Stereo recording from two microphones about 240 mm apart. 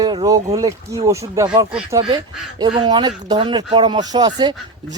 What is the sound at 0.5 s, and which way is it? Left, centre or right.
Speech, centre.